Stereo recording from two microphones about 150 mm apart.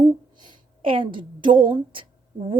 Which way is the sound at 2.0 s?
35° right (ahead or behind).